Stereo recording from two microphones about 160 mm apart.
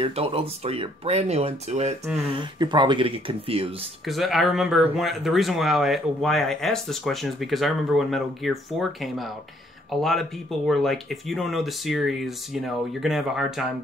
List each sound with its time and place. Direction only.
0.0 s speech: 35° right (ahead or behind)
2.3 s speech: 30° right (ahead or behind)
4.0 s speech: centre (ahead or behind)